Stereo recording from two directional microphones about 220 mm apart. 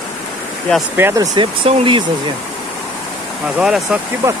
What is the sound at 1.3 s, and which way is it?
Speech, 25° right (ahead or behind).